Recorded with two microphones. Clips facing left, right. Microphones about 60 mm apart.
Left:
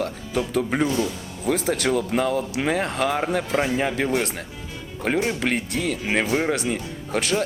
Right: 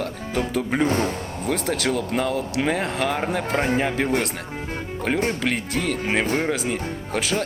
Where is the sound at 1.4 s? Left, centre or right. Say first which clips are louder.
Left 2 dB; centre.